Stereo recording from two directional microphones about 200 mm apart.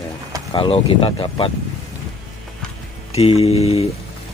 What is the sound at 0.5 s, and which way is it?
Speech, 25° left (ahead or behind).